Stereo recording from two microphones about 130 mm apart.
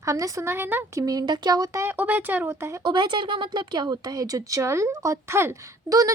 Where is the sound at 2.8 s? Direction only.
35° right (ahead or behind).